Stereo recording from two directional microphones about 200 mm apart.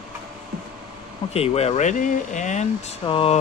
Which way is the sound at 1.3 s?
30° left (ahead or behind).